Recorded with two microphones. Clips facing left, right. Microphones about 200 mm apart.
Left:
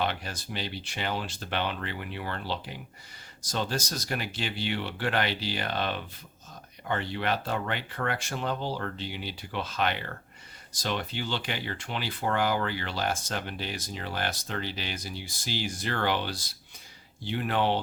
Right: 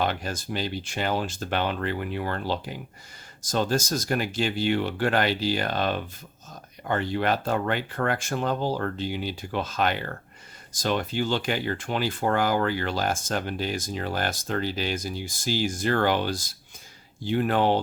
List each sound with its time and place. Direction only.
0.0 s speech: 45° right (ahead or behind)